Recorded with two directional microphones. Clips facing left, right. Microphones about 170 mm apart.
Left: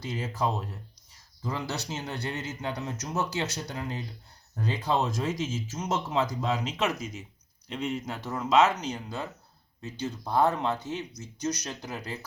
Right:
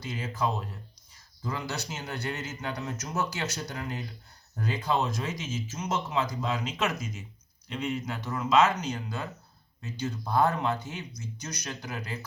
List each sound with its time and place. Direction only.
0.0 s speech: 35° left (ahead or behind)